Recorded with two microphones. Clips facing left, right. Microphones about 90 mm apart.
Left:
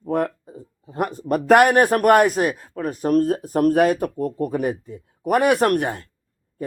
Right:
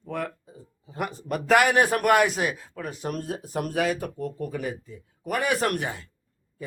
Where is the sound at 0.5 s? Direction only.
55° left (ahead or behind).